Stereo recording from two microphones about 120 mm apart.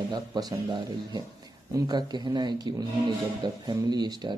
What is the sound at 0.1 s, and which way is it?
Speech, 35° right (ahead or behind).